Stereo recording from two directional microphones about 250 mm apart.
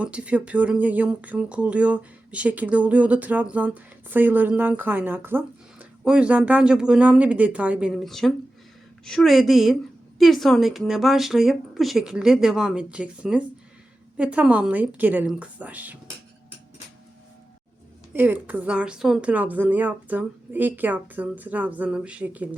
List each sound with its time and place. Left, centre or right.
0.0 s speech: centre
18.1 s speech: centre